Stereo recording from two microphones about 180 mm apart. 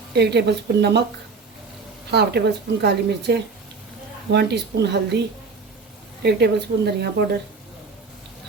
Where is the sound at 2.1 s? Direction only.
65° right (ahead or behind).